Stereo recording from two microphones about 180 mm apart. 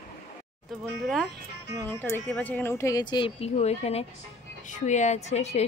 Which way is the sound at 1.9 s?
10° left (ahead or behind).